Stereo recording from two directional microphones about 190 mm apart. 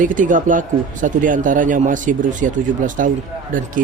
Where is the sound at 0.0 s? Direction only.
45° right (ahead or behind).